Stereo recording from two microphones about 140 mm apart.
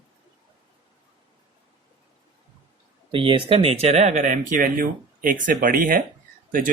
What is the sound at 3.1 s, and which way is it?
Speech, 35° right (ahead or behind).